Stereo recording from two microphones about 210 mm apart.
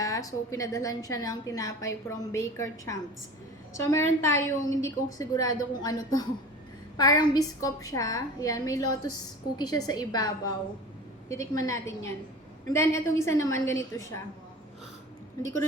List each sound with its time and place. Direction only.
0.0 s a woman's voice: 15° left (ahead or behind)